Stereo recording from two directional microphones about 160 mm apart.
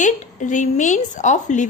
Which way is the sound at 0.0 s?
50° left (ahead or behind).